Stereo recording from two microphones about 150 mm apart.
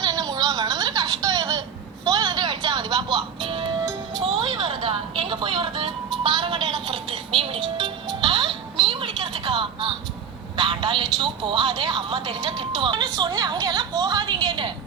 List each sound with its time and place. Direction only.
0.0 s a sound: 25° right (ahead or behind)
2.0 s music: 30° right (ahead or behind)
10.6 s a woman's voice: 35° right (ahead or behind)